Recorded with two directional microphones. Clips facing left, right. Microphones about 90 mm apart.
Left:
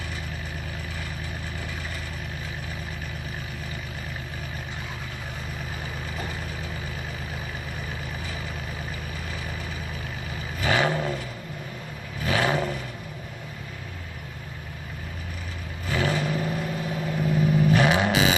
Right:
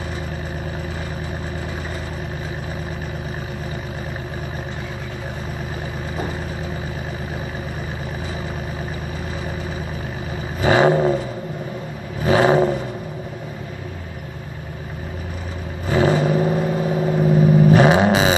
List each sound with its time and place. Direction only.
10.6 s vehicle: 30° right (ahead or behind)
15.9 s vehicle: 30° right (ahead or behind)